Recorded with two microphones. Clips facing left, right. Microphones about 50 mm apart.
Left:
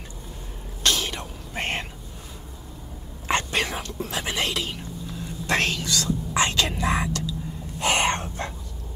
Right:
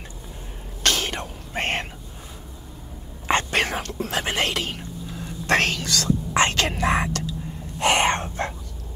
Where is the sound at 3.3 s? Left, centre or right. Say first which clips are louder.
Right 3 dB; right.